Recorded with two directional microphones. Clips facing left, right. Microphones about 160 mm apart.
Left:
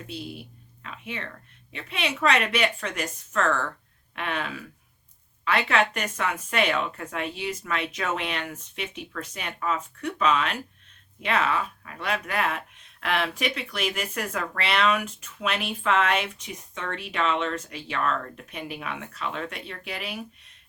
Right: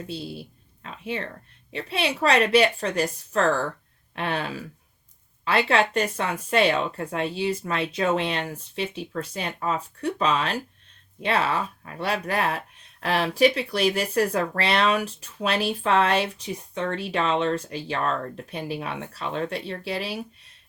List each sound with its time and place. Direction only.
0.1 s speech: 30° right (ahead or behind)